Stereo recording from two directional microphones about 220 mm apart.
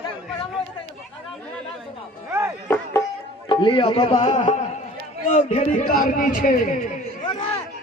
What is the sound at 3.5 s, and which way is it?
A man's voice, 20° left (ahead or behind).